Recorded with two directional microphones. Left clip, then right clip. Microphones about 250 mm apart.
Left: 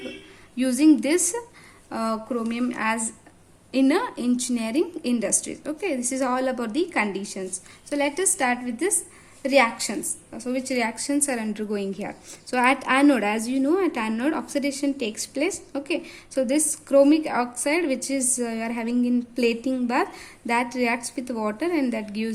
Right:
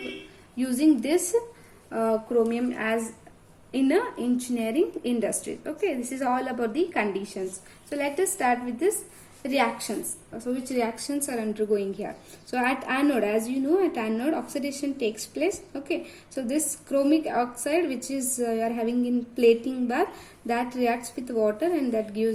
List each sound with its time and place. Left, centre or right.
0.5 s a woman's voice: left